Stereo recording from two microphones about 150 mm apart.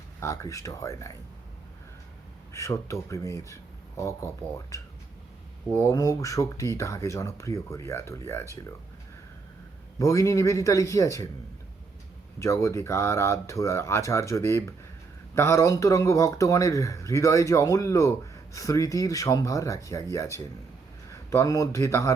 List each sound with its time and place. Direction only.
0.2 s speech: 20° left (ahead or behind)
2.5 s speech: 20° left (ahead or behind)
10.0 s speech: 20° left (ahead or behind)
12.4 s speech: 20° left (ahead or behind)